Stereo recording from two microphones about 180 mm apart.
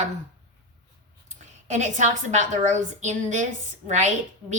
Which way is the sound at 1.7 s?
40° right (ahead or behind).